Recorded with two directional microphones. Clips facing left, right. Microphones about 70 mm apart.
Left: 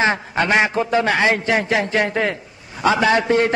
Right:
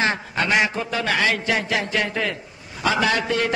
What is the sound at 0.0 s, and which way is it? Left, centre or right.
A man's voice, left.